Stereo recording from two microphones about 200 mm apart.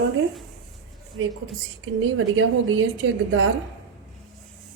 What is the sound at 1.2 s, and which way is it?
Speech, 90° right.